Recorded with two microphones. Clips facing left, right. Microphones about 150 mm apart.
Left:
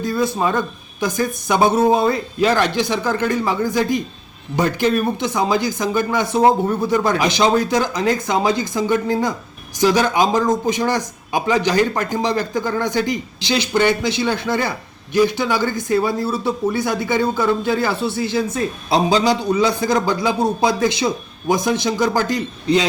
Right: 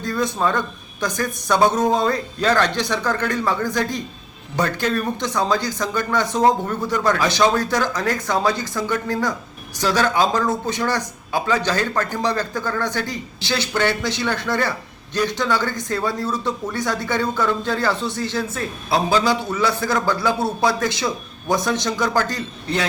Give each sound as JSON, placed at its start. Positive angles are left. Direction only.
{"t": 0.0, "sound": "speech", "side_deg": 10}